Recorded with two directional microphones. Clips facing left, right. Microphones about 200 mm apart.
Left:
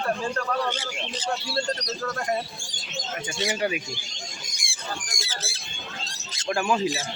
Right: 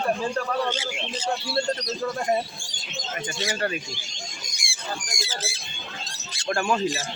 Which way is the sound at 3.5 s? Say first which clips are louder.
Left 1 dB; 10° left (ahead or behind).